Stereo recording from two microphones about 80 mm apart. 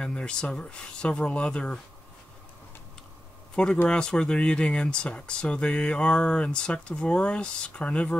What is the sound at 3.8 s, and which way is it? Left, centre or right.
Speech, centre.